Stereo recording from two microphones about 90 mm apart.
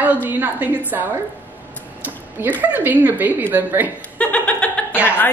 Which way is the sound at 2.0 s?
20° right (ahead or behind).